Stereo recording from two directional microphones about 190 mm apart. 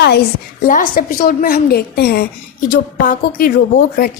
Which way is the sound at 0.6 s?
45° left (ahead or behind).